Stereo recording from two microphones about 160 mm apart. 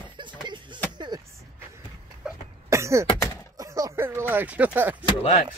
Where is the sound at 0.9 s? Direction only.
25° right (ahead or behind).